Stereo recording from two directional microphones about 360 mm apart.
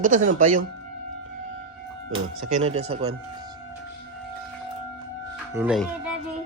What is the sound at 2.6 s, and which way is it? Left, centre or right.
Speech, centre.